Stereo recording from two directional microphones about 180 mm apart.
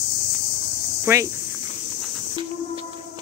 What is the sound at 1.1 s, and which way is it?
Speech, 10° right (ahead or behind).